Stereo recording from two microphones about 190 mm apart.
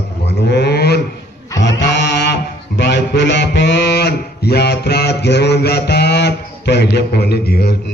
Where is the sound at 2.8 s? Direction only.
65° left (ahead or behind).